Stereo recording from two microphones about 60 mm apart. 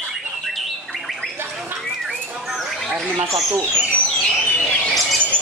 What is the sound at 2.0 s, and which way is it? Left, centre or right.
Bird, centre.